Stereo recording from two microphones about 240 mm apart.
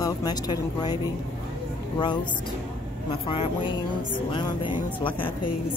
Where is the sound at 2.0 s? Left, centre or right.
Centre.